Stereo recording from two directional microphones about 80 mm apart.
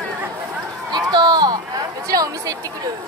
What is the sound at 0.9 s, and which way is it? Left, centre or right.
Run, right.